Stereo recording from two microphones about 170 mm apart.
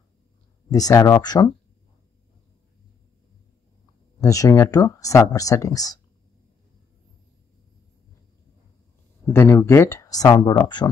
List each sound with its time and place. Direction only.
0.7 s speech: 20° left (ahead or behind)
4.2 s speech: 20° left (ahead or behind)
9.2 s speech: 15° left (ahead or behind)